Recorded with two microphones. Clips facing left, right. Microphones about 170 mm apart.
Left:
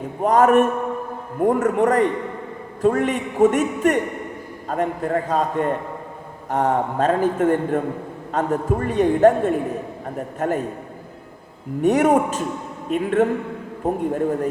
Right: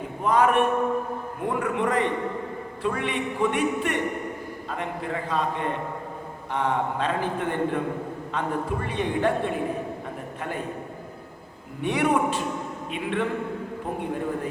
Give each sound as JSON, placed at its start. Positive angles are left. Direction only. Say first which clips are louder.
{"t": 0.2, "sound": "a man's voice", "louder": "left 6 dB", "side_deg": 45}
{"t": 11.8, "sound": "a man's voice", "louder": "left 7 dB", "side_deg": 45}